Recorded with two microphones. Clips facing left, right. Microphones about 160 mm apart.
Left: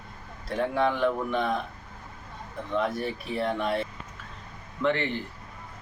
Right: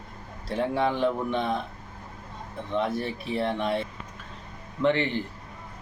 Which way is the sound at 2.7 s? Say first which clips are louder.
Even; 25° right (ahead or behind).